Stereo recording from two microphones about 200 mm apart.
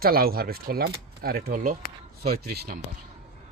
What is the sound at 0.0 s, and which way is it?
Speech, 50° right (ahead or behind).